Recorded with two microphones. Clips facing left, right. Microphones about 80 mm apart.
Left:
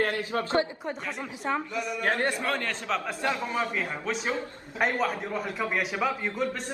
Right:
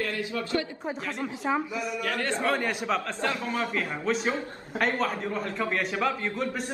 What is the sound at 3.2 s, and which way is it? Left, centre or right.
Speech, centre.